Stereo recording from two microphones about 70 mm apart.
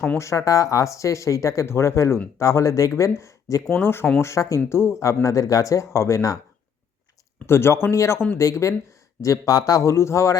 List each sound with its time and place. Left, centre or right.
0.2 s speech: left
3.7 s speech: left
4.2 s speech: left
7.4 s speech: left
9.8 s speech: left